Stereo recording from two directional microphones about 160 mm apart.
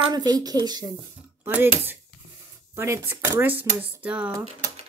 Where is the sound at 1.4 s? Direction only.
10° right (ahead or behind).